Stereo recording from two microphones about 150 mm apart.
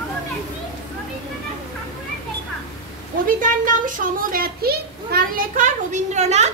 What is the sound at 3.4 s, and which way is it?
A child's voice, 65° right (ahead or behind).